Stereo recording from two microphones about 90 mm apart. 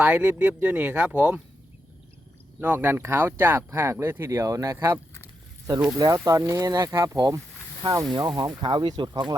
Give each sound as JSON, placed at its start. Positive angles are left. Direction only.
{"t": 0.0, "sound": "speech", "side_deg": -15}
{"t": 2.6, "sound": "speech", "side_deg": -20}
{"t": 4.3, "sound": "speech", "side_deg": -40}
{"t": 6.0, "sound": "speech", "side_deg": -40}
{"t": 8.1, "sound": "speech", "side_deg": -50}